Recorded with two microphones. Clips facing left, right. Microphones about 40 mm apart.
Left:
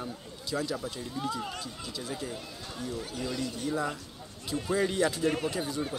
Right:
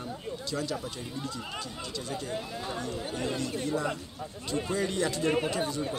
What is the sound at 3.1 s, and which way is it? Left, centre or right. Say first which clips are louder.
Speech: right 3 dB; right.